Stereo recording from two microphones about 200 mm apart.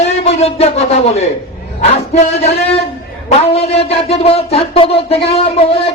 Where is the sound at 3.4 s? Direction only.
30° left (ahead or behind).